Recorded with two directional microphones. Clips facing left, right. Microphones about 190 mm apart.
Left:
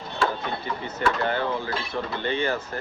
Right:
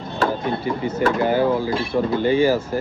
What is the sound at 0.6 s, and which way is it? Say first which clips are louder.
Speech: right 5 dB; 10° right (ahead or behind).